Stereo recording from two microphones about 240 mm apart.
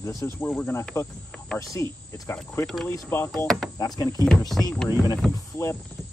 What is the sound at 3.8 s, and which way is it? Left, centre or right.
Speech, centre.